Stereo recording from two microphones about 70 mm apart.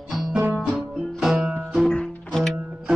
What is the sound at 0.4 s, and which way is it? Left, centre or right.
Music, centre.